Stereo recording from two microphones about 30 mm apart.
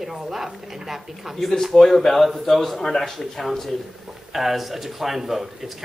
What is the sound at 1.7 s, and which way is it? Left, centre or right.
A man's voice, centre.